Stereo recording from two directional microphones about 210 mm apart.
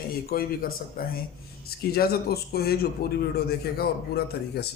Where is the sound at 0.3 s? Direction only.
45° left (ahead or behind).